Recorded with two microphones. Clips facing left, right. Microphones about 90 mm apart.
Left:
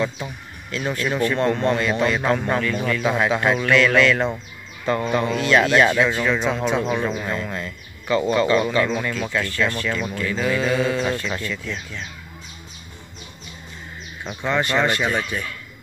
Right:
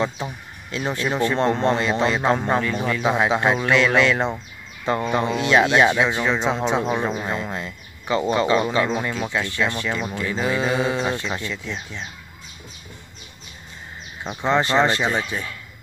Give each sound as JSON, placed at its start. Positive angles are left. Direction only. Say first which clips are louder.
{"t": 0.0, "sound": "speech", "louder": "even", "side_deg": -25}
{"t": 14.2, "sound": "speech", "louder": "right 2 dB", "side_deg": -25}